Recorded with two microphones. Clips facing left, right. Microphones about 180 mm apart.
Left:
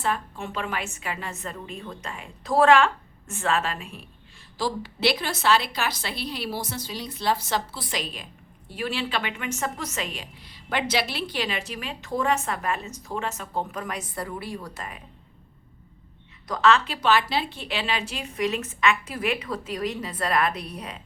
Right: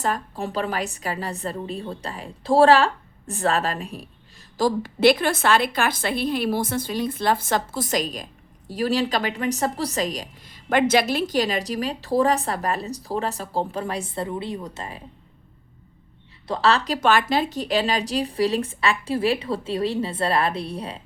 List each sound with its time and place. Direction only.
0.0 s a woman's voice: 40° right (ahead or behind)
16.5 s a woman's voice: 35° right (ahead or behind)